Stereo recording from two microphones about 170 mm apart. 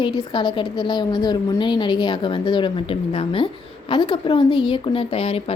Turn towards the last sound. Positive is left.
turn(degrees=35)  # may be behind; listen again after turning